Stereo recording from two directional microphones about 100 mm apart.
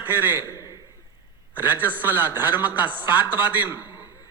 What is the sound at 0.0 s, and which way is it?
Speech, 20° right (ahead or behind).